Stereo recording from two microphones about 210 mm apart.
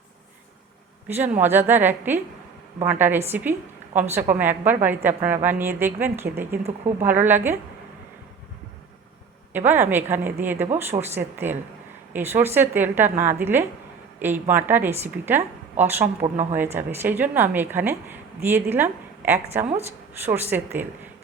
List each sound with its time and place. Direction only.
1.0 s a woman's voice: 10° right (ahead or behind)
9.5 s a woman's voice: 10° right (ahead or behind)
16.2 s speech: 35° right (ahead or behind)
16.6 s a woman's voice: 10° right (ahead or behind)